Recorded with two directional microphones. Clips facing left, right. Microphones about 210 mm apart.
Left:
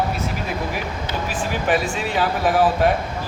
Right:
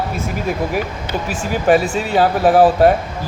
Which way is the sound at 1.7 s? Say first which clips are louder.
Right 8 dB; 40° right (ahead or behind).